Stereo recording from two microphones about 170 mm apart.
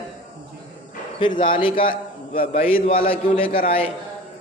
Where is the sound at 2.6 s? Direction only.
35° left (ahead or behind).